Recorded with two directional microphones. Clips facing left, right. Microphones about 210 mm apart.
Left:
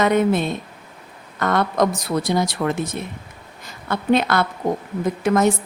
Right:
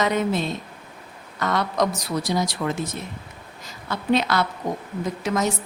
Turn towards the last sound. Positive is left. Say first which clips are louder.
# left 6 dB
turn(degrees=55)  # may be behind; listen again after turning